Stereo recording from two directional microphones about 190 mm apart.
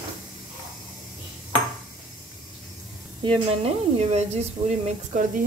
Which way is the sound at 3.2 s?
30° right (ahead or behind).